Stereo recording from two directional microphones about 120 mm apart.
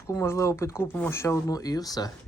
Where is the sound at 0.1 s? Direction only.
25° left (ahead or behind).